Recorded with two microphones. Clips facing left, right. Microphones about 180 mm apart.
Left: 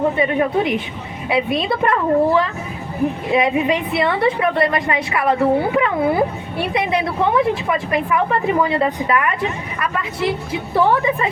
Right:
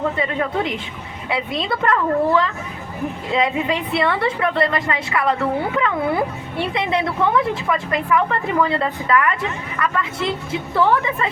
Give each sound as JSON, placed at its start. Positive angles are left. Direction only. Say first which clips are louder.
{"t": 0.0, "sound": "a woman's voice", "louder": "left 5 dB", "side_deg": 20}
{"t": 10.2, "sound": "a woman's voice", "louder": "left 2 dB", "side_deg": -25}
{"t": 10.8, "sound": "a woman's voice", "louder": "left 2 dB", "side_deg": 20}